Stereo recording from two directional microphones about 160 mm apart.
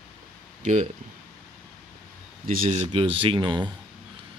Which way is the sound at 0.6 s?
50° right (ahead or behind).